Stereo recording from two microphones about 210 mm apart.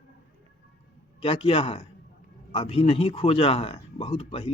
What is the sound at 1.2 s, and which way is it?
Speech, 25° left (ahead or behind).